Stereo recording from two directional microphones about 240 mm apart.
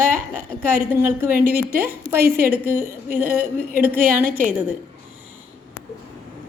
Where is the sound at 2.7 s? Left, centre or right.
Right.